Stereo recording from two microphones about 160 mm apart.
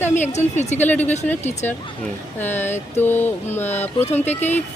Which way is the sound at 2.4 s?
10° left (ahead or behind).